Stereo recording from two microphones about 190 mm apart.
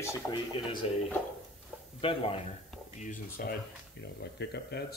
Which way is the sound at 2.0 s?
30° left (ahead or behind).